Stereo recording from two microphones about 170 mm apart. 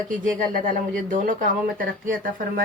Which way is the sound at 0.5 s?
50° right (ahead or behind).